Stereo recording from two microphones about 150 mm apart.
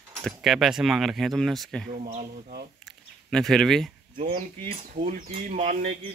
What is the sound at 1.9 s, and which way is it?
Speech, 70° right (ahead or behind).